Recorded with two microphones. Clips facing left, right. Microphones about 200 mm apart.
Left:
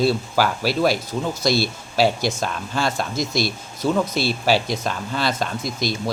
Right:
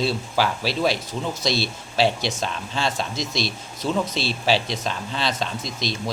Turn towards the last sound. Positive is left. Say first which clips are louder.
# left 4 dB
turn(degrees=5)  # may be behind; listen again after turning